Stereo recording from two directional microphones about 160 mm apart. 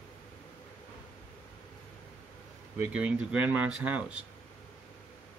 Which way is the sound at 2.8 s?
10° right (ahead or behind).